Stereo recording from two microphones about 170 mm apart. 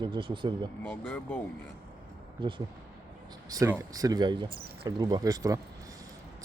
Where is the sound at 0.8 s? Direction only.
10° left (ahead or behind).